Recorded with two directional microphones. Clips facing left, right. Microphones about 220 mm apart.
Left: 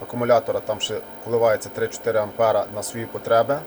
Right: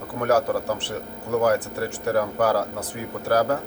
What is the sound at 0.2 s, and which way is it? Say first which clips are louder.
Speech: left 2 dB; 20° left (ahead or behind).